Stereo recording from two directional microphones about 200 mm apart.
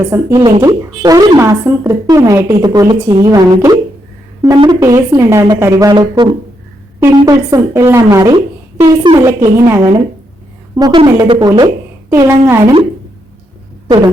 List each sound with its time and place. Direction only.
0.0 s a woman's voice: 10° right (ahead or behind)